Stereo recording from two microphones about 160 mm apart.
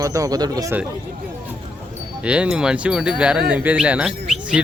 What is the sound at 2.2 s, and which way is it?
Speech, 5° right (ahead or behind).